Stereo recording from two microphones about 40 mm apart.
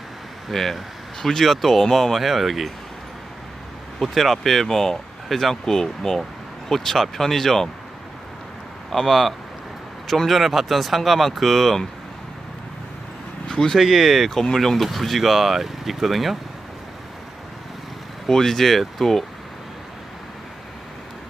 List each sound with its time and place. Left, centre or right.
0.5 s speech: centre
4.0 s speech: centre
8.9 s speech: centre
13.5 s speech: centre
13.7 s speech: centre
18.3 s speech: centre